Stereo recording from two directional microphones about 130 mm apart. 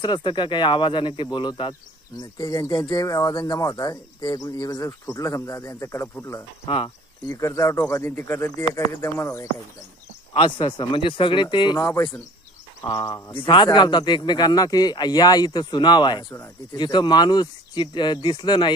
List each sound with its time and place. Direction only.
0.0 s speech: 35° left (ahead or behind); by 6.1 s 20° left (ahead or behind)
6.7 s speech: 40° left (ahead or behind)
7.3 s speech: 25° left (ahead or behind)
10.3 s speech: 40° left (ahead or behind)
11.8 s speech: 20° left (ahead or behind)
12.8 s speech: 30° left (ahead or behind)
13.4 s speech: 40° left (ahead or behind)